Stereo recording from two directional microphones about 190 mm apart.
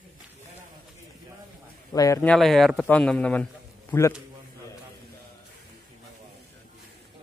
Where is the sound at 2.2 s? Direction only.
Centre (ahead or behind).